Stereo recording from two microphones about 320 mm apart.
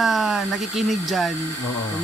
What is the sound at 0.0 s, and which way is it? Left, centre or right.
Speech, centre.